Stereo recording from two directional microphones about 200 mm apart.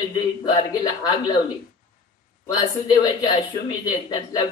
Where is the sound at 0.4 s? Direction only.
20° left (ahead or behind).